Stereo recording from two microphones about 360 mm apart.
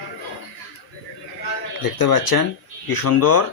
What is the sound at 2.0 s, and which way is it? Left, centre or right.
Speech, left.